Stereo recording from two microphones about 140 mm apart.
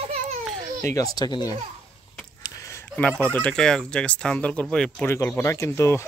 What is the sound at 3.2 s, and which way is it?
Speech, 10° left (ahead or behind).